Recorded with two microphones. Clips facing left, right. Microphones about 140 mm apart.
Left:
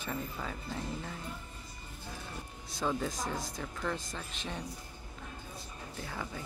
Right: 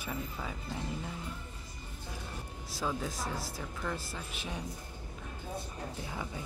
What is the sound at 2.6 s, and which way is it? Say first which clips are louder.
Speech: left 2 dB; 5° right (ahead or behind).